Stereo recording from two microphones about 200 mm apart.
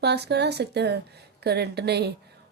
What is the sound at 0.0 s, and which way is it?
Speech, 55° right (ahead or behind).